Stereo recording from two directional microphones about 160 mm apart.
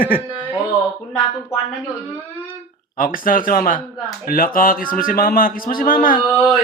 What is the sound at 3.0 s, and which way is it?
Speech, 60° left (ahead or behind).